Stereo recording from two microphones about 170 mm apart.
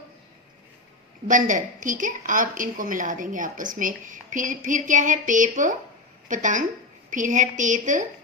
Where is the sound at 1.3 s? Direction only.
50° right (ahead or behind).